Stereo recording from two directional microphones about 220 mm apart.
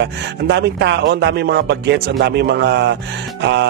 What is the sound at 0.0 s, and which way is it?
A man's voice, 50° right (ahead or behind).